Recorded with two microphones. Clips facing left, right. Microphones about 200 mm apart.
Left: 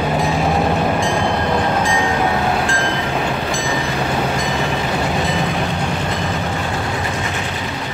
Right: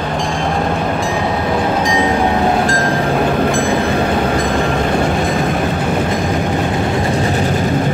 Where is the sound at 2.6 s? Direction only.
40° right (ahead or behind).